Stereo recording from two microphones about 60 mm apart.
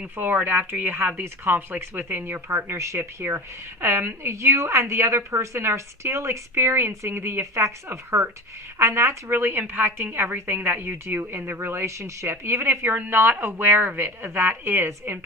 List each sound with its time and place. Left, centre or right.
0.4 s a woman's voice: right
1.2 s a woman's voice: right
2.7 s a woman's voice: right
12.9 s a woman's voice: right